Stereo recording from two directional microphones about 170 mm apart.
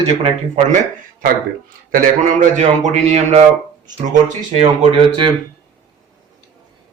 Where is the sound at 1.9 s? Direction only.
50° right (ahead or behind); by 5.3 s 30° right (ahead or behind).